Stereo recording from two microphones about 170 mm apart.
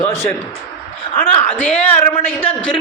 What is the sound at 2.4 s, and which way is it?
Speech, 35° left (ahead or behind).